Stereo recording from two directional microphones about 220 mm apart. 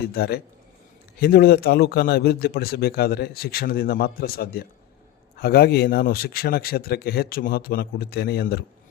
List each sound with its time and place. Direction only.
0.1 s speech: 45° left (ahead or behind)